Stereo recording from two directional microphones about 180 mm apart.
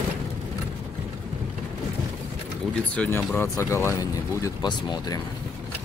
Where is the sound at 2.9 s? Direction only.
10° left (ahead or behind).